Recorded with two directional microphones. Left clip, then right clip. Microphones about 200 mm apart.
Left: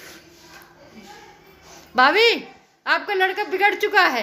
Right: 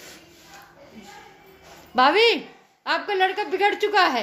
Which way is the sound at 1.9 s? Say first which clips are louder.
Left 2 dB; 15° right (ahead or behind).